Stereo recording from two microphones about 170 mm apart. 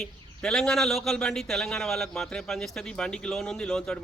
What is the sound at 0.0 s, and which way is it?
Speech, 5° left (ahead or behind).